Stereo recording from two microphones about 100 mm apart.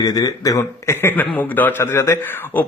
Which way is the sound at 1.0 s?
15° left (ahead or behind).